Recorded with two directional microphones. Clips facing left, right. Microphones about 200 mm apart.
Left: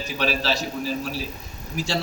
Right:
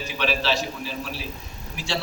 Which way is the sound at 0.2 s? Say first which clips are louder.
Even; 40° left (ahead or behind).